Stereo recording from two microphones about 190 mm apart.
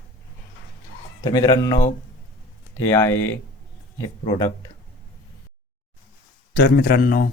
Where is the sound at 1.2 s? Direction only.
20° left (ahead or behind).